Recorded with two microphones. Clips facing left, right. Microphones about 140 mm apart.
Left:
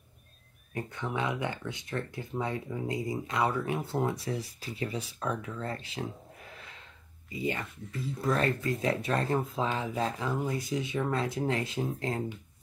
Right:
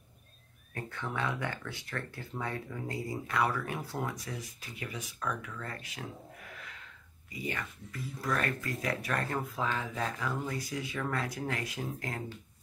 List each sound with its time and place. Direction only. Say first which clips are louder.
0.7 s speech: left 3 dB; 20° left (ahead or behind)